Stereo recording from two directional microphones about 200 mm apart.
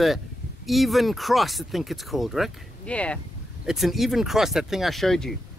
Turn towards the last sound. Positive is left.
turn(degrees=0)  # may be behind; listen again after turning